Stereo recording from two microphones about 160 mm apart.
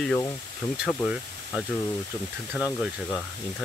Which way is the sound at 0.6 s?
20° left (ahead or behind).